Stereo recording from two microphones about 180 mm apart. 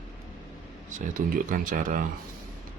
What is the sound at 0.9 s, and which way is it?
Speech, 45° right (ahead or behind).